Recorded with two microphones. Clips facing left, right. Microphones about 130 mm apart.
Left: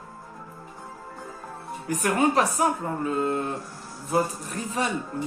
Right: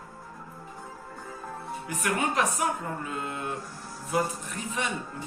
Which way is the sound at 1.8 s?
40° left (ahead or behind).